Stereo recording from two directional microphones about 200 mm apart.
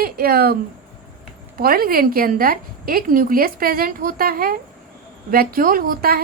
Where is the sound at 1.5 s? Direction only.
45° right (ahead or behind).